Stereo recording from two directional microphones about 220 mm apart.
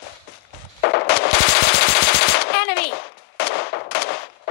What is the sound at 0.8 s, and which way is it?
Machine gun, 50° left (ahead or behind).